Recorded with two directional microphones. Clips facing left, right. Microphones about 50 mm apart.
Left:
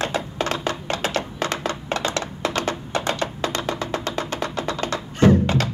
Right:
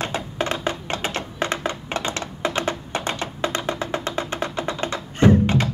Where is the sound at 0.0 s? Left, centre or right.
Right.